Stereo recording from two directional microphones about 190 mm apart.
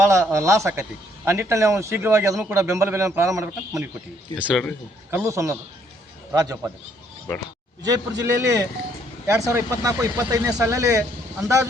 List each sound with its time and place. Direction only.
0.0 s speech: 15° right (ahead or behind)
7.9 s a man's voice: 20° right (ahead or behind)